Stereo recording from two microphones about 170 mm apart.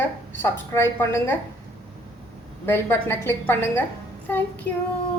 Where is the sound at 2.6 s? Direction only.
15° left (ahead or behind).